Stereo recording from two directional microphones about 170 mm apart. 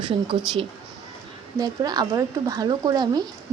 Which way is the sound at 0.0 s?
30° right (ahead or behind).